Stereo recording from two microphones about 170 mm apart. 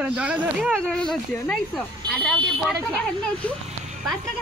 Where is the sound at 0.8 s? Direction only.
5° left (ahead or behind).